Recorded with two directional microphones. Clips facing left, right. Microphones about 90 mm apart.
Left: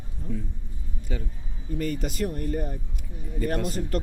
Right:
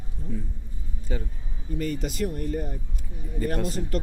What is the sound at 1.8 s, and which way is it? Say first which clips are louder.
Speech: even; 45° left (ahead or behind).